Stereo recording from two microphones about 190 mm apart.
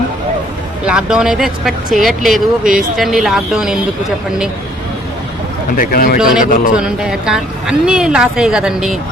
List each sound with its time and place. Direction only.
0.9 s speech: 5° right (ahead or behind)
5.7 s speech: 50° left (ahead or behind)
6.1 s speech: centre (ahead or behind)